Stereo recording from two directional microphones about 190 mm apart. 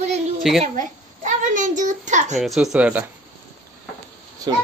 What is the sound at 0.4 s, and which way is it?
Speech, centre (ahead or behind).